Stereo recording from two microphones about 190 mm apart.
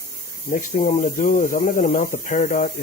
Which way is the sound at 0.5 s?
40° left (ahead or behind).